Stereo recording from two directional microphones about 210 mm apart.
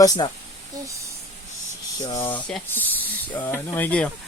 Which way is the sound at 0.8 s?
15° right (ahead or behind).